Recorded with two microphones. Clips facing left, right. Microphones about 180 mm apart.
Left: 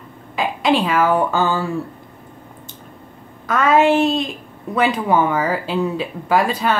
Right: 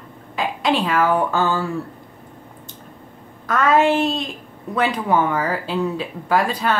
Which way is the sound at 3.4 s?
5° left (ahead or behind).